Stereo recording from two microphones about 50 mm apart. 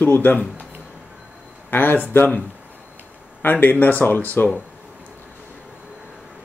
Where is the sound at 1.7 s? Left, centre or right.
Left.